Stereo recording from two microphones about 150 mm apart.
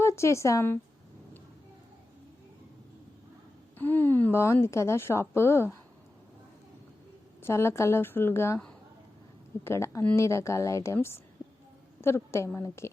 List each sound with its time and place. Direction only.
0.0 s speech: 20° left (ahead or behind)
3.8 s a woman's voice: 10° left (ahead or behind)
7.4 s a woman's voice: 15° left (ahead or behind)
9.6 s speech: 20° left (ahead or behind)
11.4 s a sound: 5° left (ahead or behind)
11.9 s a woman's voice: 15° left (ahead or behind)